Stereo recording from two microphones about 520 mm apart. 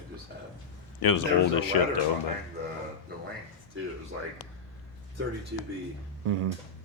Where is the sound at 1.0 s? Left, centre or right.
Left.